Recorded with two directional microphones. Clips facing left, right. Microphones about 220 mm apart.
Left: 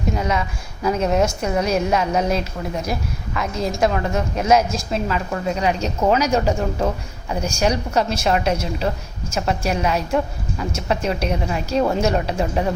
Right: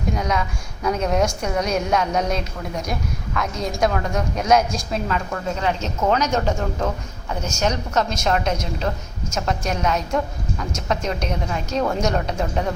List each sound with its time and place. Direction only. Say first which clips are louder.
0.1 s a woman's voice: left 1 dB; 5° left (ahead or behind)
5.5 s speech: left 2 dB; 15° left (ahead or behind)